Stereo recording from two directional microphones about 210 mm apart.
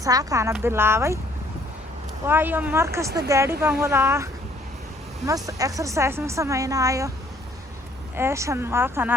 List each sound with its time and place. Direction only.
0.0 s a woman's voice: 15° right (ahead or behind)
2.2 s a woman's voice: 10° right (ahead or behind)
8.1 s a woman's voice: 10° right (ahead or behind)